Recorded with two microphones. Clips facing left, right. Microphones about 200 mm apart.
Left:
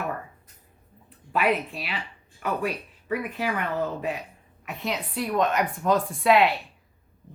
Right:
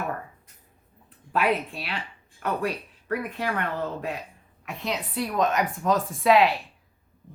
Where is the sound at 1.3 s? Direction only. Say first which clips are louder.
Even; centre (ahead or behind).